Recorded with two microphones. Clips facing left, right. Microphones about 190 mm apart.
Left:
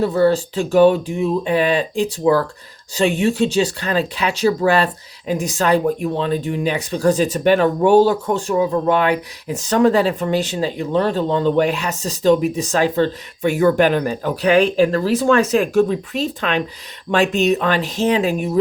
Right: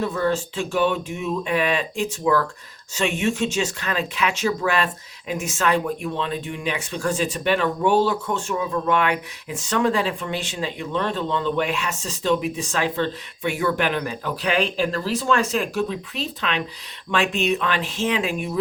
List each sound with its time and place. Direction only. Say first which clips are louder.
0.0 s speech: left 7 dB; 35° left (ahead or behind)